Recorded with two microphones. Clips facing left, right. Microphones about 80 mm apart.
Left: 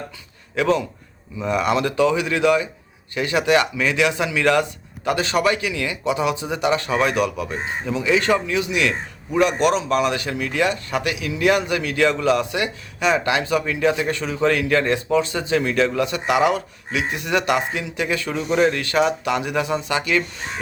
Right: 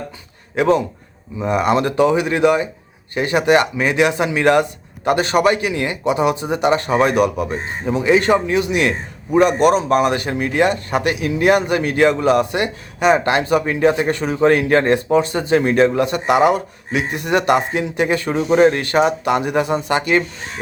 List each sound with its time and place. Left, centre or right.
0.5 s a man's voice: right